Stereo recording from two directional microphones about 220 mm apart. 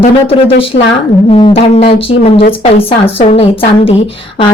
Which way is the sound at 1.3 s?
25° left (ahead or behind).